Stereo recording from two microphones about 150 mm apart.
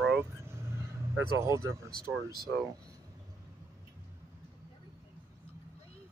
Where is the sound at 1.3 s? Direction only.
20° right (ahead or behind).